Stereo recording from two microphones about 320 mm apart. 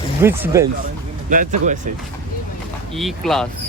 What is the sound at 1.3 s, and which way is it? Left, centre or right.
Speech, right.